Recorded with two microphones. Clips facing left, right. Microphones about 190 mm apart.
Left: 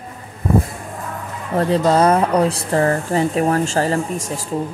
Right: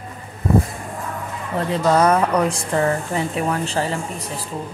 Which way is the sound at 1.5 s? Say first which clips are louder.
Left 3 dB; 35° left (ahead or behind).